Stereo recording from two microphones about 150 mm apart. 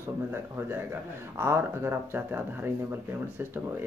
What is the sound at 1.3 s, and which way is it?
Speech, 15° right (ahead or behind).